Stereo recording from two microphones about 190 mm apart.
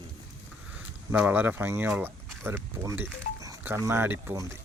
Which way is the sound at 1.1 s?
10° right (ahead or behind).